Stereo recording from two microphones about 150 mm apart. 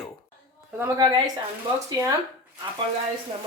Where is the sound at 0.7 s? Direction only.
15° right (ahead or behind).